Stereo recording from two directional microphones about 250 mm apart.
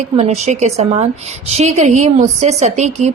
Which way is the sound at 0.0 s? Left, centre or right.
Right.